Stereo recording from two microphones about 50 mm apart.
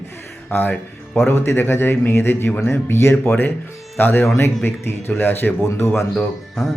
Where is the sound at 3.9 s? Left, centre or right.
Left.